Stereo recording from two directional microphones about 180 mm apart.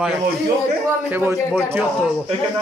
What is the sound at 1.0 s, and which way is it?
Speech, 10° right (ahead or behind).